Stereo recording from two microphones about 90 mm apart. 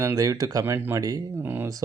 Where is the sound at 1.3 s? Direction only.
25° right (ahead or behind).